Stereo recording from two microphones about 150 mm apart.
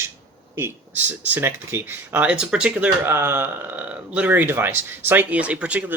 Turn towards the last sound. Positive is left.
turn(degrees=-10)  # may be behind; listen again after turning